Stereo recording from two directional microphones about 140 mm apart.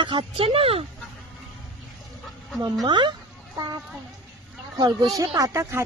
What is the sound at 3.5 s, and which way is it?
Children playing, 30° right (ahead or behind).